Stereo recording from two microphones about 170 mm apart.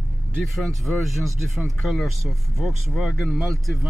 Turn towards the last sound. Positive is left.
turn(degrees=0)  # may be behind; listen again after turning